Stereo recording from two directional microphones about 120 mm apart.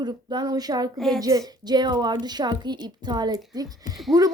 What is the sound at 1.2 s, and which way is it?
A woman's voice, 30° right (ahead or behind).